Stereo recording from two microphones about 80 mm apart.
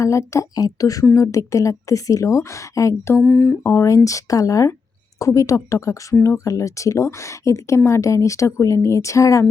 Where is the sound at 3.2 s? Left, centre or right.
Centre.